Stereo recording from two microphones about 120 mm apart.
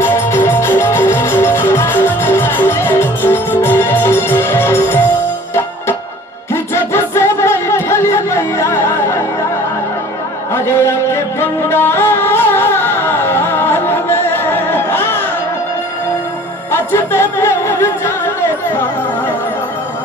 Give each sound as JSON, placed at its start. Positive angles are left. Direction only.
{"t": 0.0, "sound": "music", "side_deg": 15}
{"t": 10.5, "sound": "music", "side_deg": 20}
{"t": 16.7, "sound": "music", "side_deg": 20}